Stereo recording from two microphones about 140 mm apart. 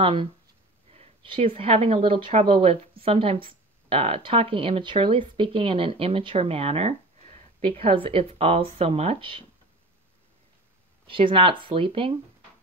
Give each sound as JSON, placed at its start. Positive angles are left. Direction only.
{"t": 0.0, "sound": "speech", "side_deg": -40}
{"t": 11.1, "sound": "speech", "side_deg": -40}